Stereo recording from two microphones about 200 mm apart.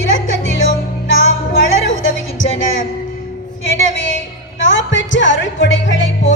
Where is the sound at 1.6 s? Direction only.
70° left (ahead or behind).